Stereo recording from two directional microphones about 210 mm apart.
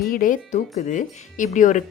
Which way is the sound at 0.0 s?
40° left (ahead or behind).